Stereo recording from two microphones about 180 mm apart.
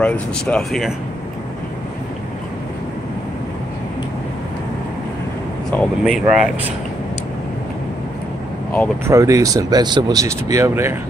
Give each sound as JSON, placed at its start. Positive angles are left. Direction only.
{"t": 0.0, "sound": "speech", "side_deg": 5}
{"t": 5.7, "sound": "speech", "side_deg": 0}
{"t": 9.0, "sound": "speech", "side_deg": -15}